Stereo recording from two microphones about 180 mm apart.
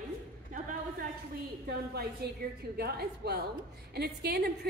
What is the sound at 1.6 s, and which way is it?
A woman's voice, 60° right (ahead or behind).